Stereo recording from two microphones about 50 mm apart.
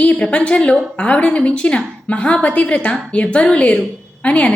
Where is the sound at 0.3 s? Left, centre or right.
Left.